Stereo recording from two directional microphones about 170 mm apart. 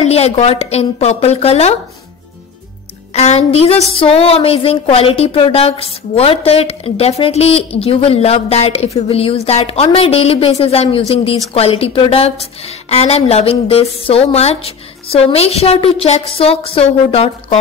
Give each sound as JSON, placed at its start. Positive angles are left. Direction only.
{"t": 0.1, "sound": "speech", "side_deg": 35}
{"t": 3.1, "sound": "speech", "side_deg": 40}